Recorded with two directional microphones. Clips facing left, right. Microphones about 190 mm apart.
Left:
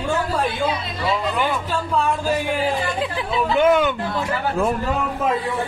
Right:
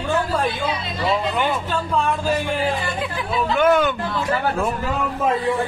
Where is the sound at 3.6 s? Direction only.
20° left (ahead or behind).